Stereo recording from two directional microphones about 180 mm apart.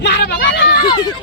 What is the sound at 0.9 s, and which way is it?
Speech, 25° left (ahead or behind).